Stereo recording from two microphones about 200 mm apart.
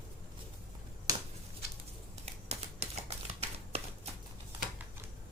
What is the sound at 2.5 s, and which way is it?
Typewriter, 30° right (ahead or behind).